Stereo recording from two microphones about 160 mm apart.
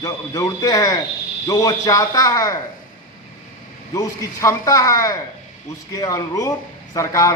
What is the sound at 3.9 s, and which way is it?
A man's voice, 20° left (ahead or behind).